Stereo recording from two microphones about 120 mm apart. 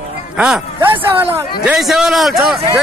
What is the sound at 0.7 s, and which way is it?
Speech, 20° right (ahead or behind).